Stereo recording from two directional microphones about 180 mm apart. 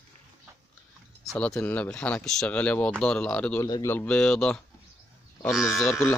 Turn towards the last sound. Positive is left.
turn(degrees=0)  # may be behind; listen again after turning